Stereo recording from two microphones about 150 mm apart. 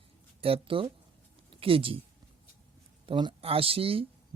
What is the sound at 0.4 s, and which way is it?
Speech, 35° right (ahead or behind).